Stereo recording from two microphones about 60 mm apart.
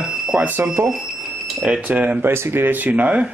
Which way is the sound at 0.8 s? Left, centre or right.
Right.